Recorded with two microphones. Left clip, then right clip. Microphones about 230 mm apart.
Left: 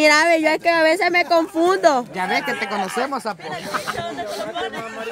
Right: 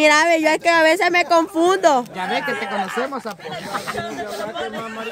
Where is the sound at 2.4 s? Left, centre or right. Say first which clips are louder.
Even; centre.